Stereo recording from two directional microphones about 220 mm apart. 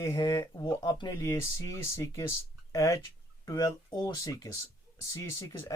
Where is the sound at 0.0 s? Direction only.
15° left (ahead or behind).